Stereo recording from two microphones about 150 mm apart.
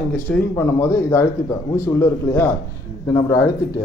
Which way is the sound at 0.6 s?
20° left (ahead or behind).